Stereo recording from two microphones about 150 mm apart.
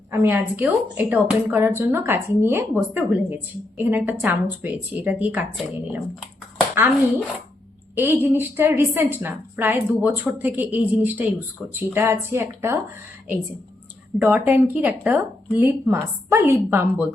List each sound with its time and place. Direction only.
0.1 s a woman's voice: 15° right (ahead or behind)
7.9 s a woman's voice: 15° right (ahead or behind)
14.2 s a woman's voice: 10° right (ahead or behind)